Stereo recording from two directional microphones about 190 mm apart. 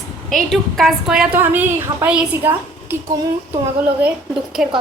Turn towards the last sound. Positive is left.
turn(degrees=-5)  # may be behind; listen again after turning